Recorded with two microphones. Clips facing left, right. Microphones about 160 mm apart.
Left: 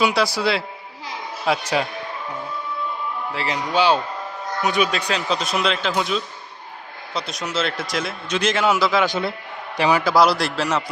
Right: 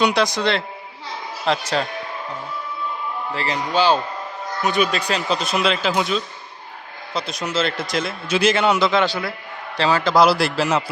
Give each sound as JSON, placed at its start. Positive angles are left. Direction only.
{"t": 0.0, "sound": "a man's voice", "side_deg": 5}
{"t": 3.3, "sound": "a man's voice", "side_deg": 5}
{"t": 9.0, "sound": "a man's voice", "side_deg": 25}
{"t": 10.2, "sound": "a man's voice", "side_deg": -5}